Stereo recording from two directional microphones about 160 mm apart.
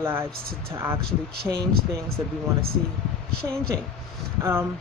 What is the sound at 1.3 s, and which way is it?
Speech, 75° right (ahead or behind).